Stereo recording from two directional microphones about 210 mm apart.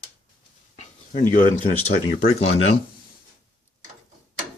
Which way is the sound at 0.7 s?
35° left (ahead or behind).